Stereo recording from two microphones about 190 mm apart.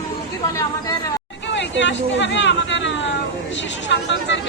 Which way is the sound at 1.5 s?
70° left (ahead or behind).